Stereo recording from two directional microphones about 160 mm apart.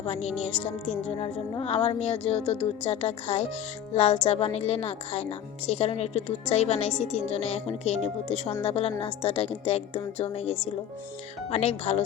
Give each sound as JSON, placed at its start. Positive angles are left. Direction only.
{"t": 0.0, "sound": "a woman's voice", "side_deg": 40}